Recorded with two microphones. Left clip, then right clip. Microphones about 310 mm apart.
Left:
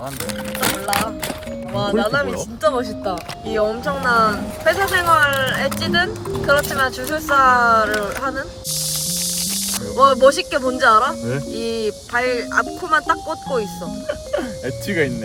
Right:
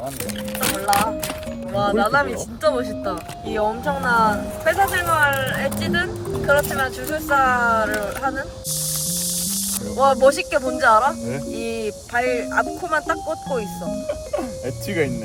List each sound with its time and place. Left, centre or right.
0.6 s music: centre
2.0 s speech: centre
10.0 s speech: centre
14.8 s speech: left